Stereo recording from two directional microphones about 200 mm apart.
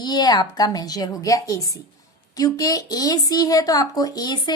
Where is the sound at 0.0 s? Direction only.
20° left (ahead or behind).